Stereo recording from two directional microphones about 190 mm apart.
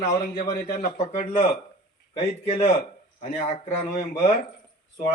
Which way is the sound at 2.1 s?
30° left (ahead or behind).